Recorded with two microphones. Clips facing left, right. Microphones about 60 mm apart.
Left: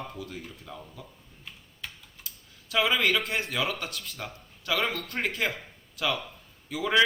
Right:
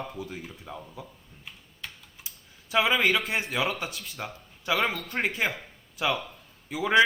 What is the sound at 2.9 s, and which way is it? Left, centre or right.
Speech, centre.